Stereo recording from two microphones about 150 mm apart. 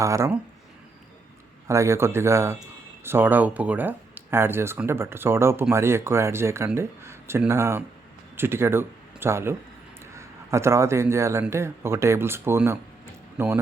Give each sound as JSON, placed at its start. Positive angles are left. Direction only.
{"t": 0.0, "sound": "speech", "side_deg": -20}
{"t": 1.6, "sound": "a man's voice", "side_deg": -20}